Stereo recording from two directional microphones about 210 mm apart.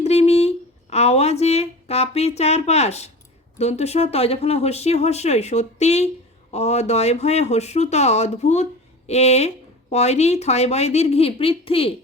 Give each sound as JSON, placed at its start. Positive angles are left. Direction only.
{"t": 0.0, "sound": "speech", "side_deg": 30}